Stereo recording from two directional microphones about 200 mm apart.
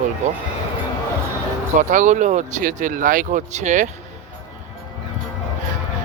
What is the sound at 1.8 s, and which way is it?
Speech, 40° right (ahead or behind).